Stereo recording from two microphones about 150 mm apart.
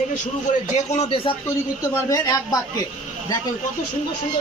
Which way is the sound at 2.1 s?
25° left (ahead or behind).